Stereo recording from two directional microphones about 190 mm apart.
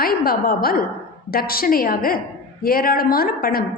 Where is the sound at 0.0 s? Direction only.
50° left (ahead or behind).